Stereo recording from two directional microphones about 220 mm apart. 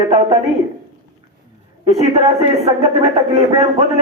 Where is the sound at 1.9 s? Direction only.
30° right (ahead or behind).